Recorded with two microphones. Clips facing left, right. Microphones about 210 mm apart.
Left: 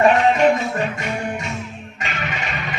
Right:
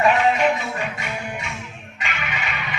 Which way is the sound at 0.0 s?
45° left (ahead or behind).